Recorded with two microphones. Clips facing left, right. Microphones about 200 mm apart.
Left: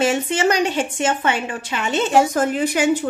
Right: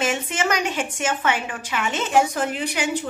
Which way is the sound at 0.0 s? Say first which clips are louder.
Left 6 dB; 30° left (ahead or behind).